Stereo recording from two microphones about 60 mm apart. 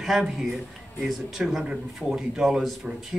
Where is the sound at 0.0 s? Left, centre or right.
Centre.